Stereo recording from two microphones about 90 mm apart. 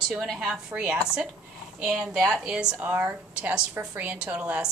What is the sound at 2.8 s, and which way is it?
A woman's voice, 20° right (ahead or behind).